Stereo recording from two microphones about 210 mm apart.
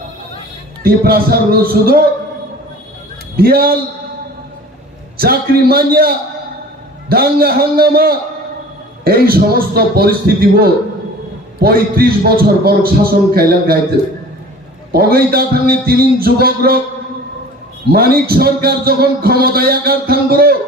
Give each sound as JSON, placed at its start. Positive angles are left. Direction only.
{"t": 0.8, "sound": "a man's voice", "side_deg": -45}
{"t": 3.3, "sound": "a man's voice", "side_deg": -45}
{"t": 5.1, "sound": "a man's voice", "side_deg": -45}
{"t": 14.9, "sound": "a man's voice", "side_deg": -45}
{"t": 17.9, "sound": "a man's voice", "side_deg": -45}